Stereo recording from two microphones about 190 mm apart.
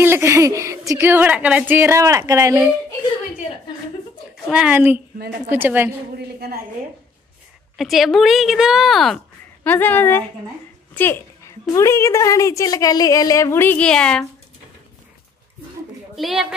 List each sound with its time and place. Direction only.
0.0 s a woman's voice: 15° right (ahead or behind)
4.5 s a woman's voice: 5° right (ahead or behind)
7.7 s speech: centre (ahead or behind)
16.2 s speech: centre (ahead or behind)